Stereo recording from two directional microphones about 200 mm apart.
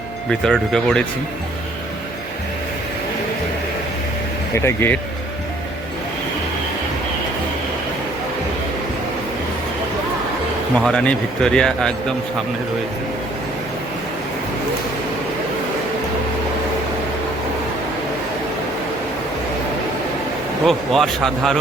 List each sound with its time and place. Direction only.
0.3 s speech: 5° left (ahead or behind)
4.5 s speech: 10° left (ahead or behind)
10.8 s speech: 5° left (ahead or behind)
20.7 s speech: centre (ahead or behind)